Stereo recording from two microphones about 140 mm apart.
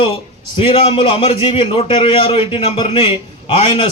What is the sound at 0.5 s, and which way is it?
A man's voice, 40° left (ahead or behind).